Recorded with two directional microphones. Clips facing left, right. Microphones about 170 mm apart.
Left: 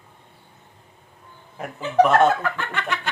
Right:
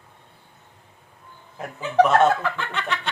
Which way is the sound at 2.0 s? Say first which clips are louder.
Left 1 dB; 5° left (ahead or behind).